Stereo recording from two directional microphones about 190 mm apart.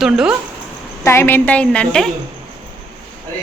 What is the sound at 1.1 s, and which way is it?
A woman's voice, 10° left (ahead or behind).